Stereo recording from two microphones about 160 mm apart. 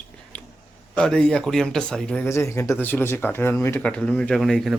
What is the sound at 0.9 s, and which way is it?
Speech, 5° left (ahead or behind).